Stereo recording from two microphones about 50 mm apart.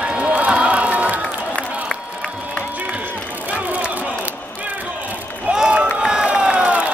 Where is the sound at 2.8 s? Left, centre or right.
Right.